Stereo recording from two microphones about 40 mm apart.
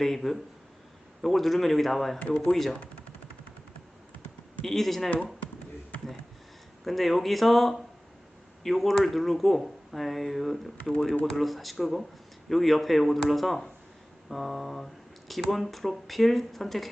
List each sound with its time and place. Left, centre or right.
0.0 s speech: centre
2.1 s speech: left
2.4 s speech: centre
4.6 s speech: centre
6.8 s speech: centre